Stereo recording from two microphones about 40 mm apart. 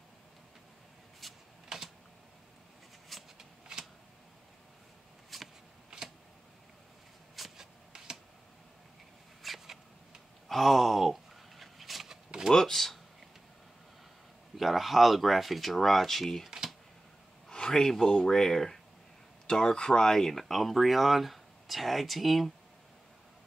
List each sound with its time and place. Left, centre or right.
1.2 s computer keyboard: centre
1.7 s typing: centre
3.3 s shuffling cards: centre
5.3 s vehicle: centre
5.9 s a sound: centre
7.3 s a sound: centre
9.4 s a sound: centre
12.4 s speech: centre
14.6 s speech: centre
16.4 s computer keyboard: centre
17.5 s speech: centre